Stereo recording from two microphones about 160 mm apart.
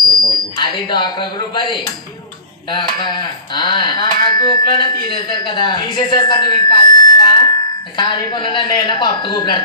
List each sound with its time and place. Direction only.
0.1 s speech: 30° left (ahead or behind)